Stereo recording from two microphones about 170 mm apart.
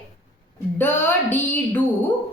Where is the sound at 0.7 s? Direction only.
10° left (ahead or behind).